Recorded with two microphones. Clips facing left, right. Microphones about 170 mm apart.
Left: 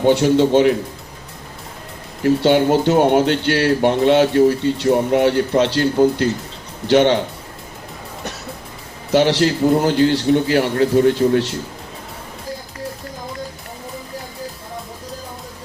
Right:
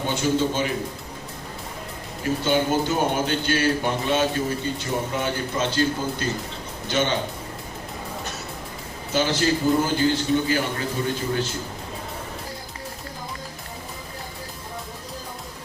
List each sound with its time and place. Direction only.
0.0 s speech: 75° left (ahead or behind)
2.2 s speech: 75° left (ahead or behind)
9.1 s speech: 75° left (ahead or behind)